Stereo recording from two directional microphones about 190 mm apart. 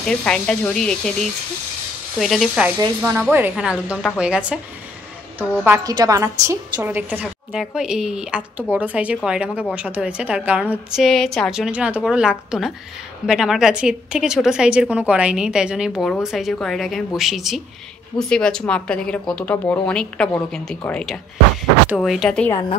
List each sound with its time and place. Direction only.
0.0 s a woman's voice: 5° left (ahead or behind)
5.9 s a woman's voice: 20° right (ahead or behind); by 22.5 s 5° left (ahead or behind)
22.5 s a woman's voice: 25° left (ahead or behind)